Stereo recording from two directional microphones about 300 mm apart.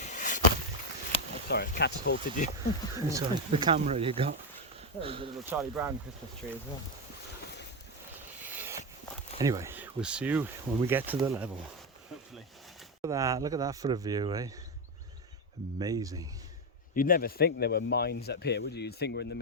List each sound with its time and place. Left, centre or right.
0.0 s a sound: left
1.5 s speech: left
3.1 s speech: centre
8.4 s a sound: centre
9.4 s speech: centre
13.0 s speech: centre
15.8 s speech: centre
16.9 s speech: left